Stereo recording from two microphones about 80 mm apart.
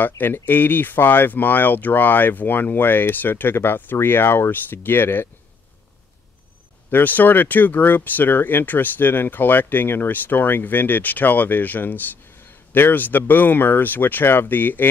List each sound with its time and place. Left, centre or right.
0.0 s speech: left
6.9 s speech: left